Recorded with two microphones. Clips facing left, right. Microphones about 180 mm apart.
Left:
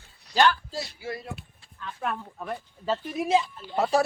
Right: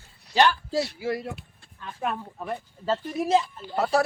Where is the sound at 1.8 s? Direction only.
30° right (ahead or behind).